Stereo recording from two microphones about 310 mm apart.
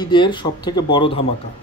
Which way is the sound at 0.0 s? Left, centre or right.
Centre.